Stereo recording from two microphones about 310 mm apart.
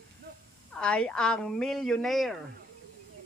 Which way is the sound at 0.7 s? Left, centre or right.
Centre.